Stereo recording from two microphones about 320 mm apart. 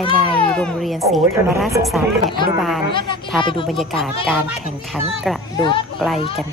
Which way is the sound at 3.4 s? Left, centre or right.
Centre.